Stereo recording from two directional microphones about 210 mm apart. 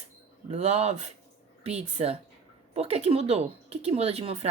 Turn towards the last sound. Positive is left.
turn(degrees=-30)  # may be behind; listen again after turning